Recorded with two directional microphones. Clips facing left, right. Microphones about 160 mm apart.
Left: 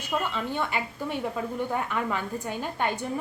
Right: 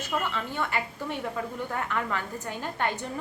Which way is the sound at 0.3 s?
20° left (ahead or behind).